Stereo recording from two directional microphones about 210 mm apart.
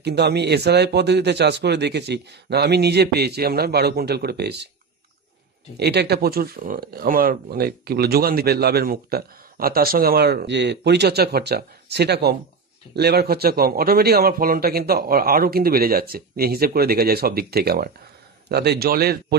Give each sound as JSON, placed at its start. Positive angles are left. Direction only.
{"t": 0.0, "sound": "speech", "side_deg": -50}
{"t": 5.8, "sound": "speech", "side_deg": -50}